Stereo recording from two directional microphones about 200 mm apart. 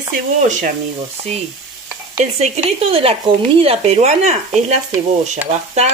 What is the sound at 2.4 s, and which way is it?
Speech, 30° right (ahead or behind).